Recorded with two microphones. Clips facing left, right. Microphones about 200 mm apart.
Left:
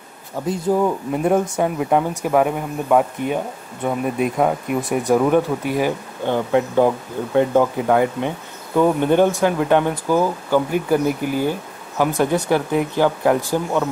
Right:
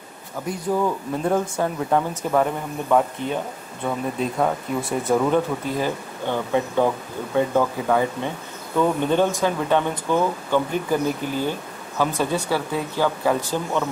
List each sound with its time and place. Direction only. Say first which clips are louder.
0.5 s speech: left 4 dB; 25° left (ahead or behind)